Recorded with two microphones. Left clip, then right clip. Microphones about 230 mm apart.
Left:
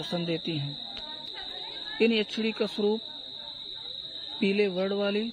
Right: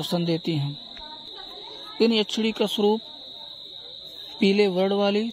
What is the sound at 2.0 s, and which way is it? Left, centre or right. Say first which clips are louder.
Speech: right 4 dB; right.